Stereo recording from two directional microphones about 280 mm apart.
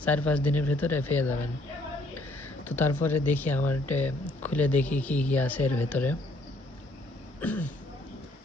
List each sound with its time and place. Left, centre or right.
0.0 s speech: centre
2.6 s speech: centre
7.4 s speech: centre